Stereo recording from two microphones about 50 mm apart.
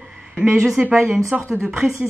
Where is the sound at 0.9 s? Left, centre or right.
Centre.